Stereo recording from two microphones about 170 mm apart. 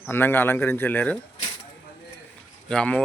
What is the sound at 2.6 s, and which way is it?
Speech, 5° left (ahead or behind).